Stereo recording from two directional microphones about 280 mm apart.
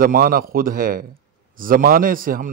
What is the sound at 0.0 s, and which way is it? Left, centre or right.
A man's voice, right.